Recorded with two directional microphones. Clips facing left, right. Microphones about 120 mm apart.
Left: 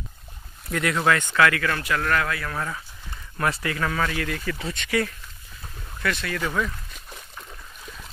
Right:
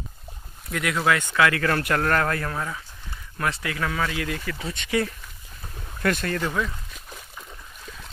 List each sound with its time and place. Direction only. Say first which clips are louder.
0.7 s speech: left 1 dB; centre (ahead or behind)
1.5 s speech: right 2 dB; 35° right (ahead or behind)
2.5 s speech: even; 5° right (ahead or behind)
4.1 s speech: even; 15° right (ahead or behind)
4.5 s speech: left 2 dB; 5° right (ahead or behind)
4.8 s speech: even; 15° right (ahead or behind)
6.0 s speech: right 3 dB; 45° right (ahead or behind)
6.4 s a sound: even; 5° right (ahead or behind)